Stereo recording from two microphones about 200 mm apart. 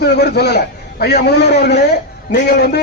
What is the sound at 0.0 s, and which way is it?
A man's voice, 55° left (ahead or behind).